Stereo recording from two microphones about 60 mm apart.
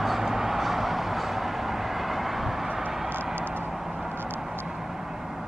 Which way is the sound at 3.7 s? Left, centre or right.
Centre.